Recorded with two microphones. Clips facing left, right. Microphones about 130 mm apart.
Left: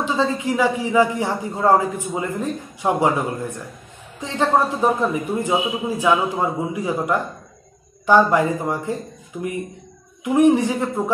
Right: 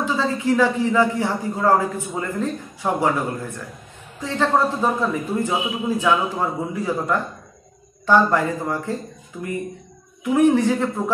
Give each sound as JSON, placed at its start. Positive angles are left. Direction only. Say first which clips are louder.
{"t": 0.0, "sound": "a man's voice", "louder": "left 1 dB", "side_deg": 20}